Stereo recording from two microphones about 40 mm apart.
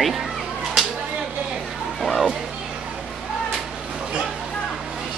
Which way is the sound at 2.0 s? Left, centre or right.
Centre.